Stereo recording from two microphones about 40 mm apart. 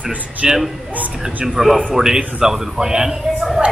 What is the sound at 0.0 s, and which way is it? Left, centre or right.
Speech, right.